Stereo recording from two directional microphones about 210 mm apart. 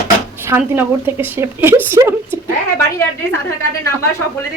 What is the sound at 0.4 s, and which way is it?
Speech, 10° right (ahead or behind).